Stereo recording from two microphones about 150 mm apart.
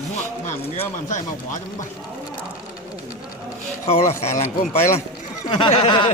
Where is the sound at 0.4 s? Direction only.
50° left (ahead or behind).